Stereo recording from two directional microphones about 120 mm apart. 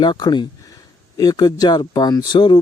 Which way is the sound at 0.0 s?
35° left (ahead or behind).